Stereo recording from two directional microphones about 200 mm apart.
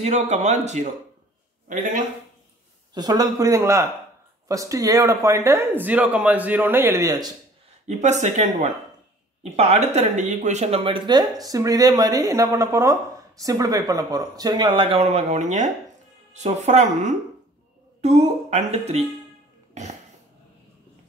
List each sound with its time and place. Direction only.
0.0 s speech: 35° right (ahead or behind)
2.9 s a man's voice: 20° right (ahead or behind)
7.8 s speech: 35° right (ahead or behind)
19.7 s cough: 35° right (ahead or behind)